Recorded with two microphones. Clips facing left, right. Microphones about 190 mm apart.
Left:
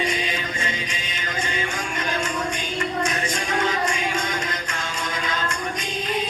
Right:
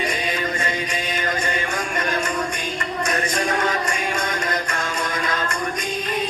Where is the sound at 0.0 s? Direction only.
60° right (ahead or behind).